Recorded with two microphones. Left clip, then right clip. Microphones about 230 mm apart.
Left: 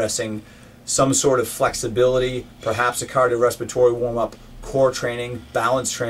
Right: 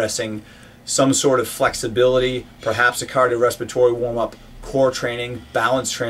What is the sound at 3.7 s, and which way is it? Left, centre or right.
Speech, right.